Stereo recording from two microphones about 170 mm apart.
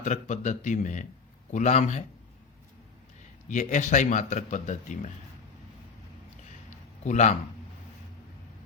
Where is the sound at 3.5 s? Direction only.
45° left (ahead or behind).